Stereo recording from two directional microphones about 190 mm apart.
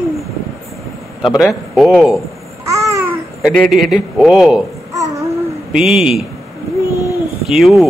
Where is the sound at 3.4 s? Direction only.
Centre (ahead or behind).